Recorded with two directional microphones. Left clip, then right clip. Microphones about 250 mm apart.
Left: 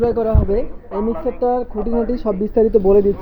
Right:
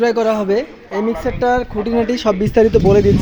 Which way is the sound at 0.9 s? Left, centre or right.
Right.